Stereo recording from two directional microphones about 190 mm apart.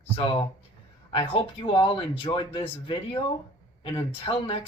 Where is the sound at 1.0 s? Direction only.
30° left (ahead or behind).